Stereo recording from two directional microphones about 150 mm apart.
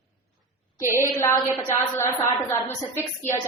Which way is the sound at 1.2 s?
15° left (ahead or behind).